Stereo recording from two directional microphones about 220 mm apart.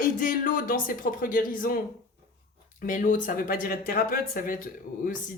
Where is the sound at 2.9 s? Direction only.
35° left (ahead or behind).